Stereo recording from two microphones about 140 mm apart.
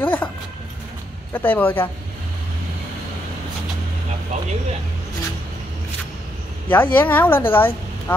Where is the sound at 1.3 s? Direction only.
10° left (ahead or behind).